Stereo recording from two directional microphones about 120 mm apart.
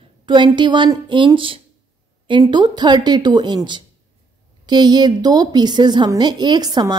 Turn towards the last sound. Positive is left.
turn(degrees=-35)  # may be behind; listen again after turning